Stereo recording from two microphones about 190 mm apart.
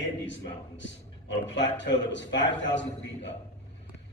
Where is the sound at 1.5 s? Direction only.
70° left (ahead or behind).